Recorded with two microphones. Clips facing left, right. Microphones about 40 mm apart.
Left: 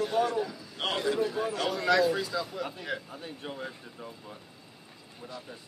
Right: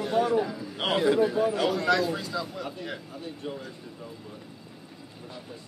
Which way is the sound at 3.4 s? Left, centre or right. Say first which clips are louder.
Right 4 dB; left.